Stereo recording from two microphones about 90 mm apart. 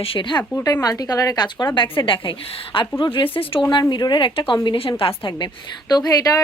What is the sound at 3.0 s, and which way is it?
Speech, 60° left (ahead or behind).